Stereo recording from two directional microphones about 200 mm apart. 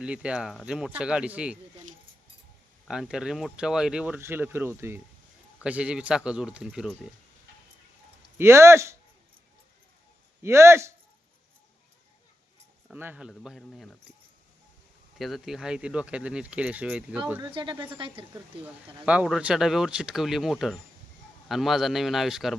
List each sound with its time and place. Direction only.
0.0 s speech: 5° right (ahead or behind)
2.8 s speech: centre (ahead or behind)
8.4 s speech: 10° right (ahead or behind)
10.4 s speech: 15° right (ahead or behind)
12.9 s speech: 10° right (ahead or behind)
15.2 s speech: centre (ahead or behind)
17.4 s speech: 25° right (ahead or behind)
18.6 s speech: 5° right (ahead or behind)